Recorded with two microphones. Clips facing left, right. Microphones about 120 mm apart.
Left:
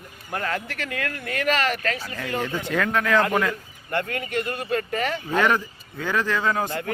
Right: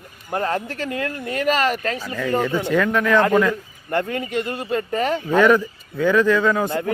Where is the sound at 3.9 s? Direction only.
30° right (ahead or behind).